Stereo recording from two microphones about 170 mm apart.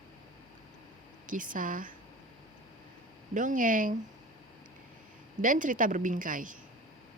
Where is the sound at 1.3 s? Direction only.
50° right (ahead or behind).